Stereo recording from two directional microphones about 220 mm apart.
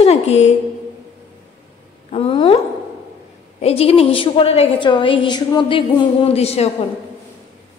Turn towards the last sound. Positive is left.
turn(degrees=30)  # may be behind; listen again after turning